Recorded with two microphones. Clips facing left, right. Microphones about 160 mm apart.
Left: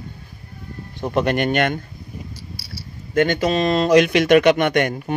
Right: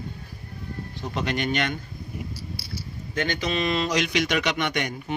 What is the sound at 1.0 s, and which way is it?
Speech, 55° left (ahead or behind).